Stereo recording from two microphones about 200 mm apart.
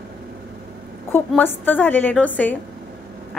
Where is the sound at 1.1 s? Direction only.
10° left (ahead or behind).